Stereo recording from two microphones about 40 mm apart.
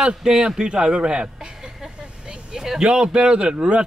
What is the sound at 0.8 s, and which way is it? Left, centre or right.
Vehicle, centre.